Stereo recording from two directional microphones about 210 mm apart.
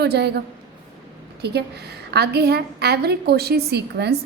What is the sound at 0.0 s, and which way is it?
A woman's voice, 50° right (ahead or behind).